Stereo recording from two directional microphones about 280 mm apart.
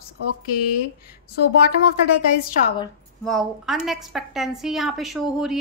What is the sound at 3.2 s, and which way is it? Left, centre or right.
A woman's voice, centre.